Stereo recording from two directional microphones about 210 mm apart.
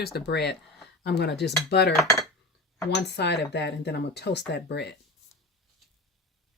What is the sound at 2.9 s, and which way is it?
Speech, 55° left (ahead or behind).